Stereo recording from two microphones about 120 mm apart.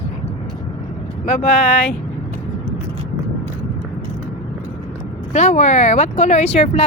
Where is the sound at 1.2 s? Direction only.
75° left (ahead or behind).